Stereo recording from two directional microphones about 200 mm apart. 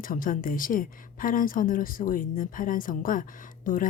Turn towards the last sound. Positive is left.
turn(degrees=40)  # may be behind; listen again after turning